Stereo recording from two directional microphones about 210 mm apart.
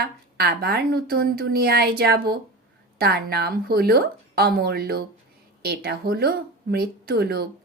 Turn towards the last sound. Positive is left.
turn(degrees=-50)  # may be behind; listen again after turning